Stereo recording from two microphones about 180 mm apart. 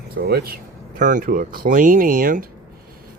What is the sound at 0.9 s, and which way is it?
Speech, 45° right (ahead or behind).